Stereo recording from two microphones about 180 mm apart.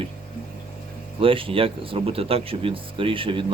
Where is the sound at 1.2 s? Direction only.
30° right (ahead or behind).